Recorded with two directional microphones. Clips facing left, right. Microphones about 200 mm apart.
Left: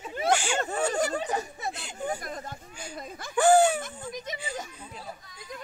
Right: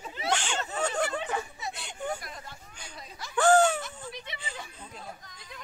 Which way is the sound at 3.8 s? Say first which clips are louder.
Left 3 dB; 45° left (ahead or behind).